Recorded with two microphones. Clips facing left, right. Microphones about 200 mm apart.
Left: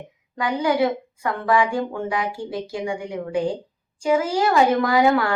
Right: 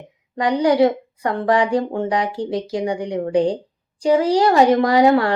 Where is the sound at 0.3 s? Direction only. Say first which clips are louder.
Right 5 dB; 35° right (ahead or behind).